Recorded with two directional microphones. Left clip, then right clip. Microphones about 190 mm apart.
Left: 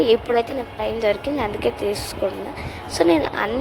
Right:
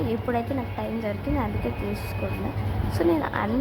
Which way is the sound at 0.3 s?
50° left (ahead or behind).